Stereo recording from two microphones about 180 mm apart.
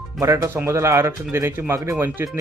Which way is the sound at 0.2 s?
15° right (ahead or behind).